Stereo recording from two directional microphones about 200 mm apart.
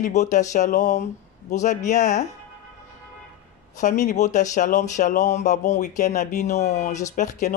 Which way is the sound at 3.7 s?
40° left (ahead or behind).